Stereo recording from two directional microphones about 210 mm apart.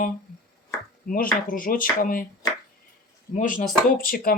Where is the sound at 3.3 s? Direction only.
40° left (ahead or behind).